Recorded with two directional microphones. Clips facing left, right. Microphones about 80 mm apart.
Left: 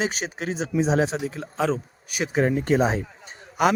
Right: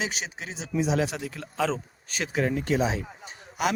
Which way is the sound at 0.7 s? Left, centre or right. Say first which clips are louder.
Left 3 dB; left.